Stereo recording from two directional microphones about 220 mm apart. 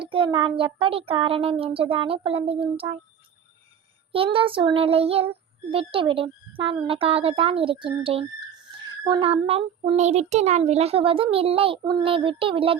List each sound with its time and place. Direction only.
0.0 s child singing: 25° right (ahead or behind)
4.1 s child singing: 25° right (ahead or behind)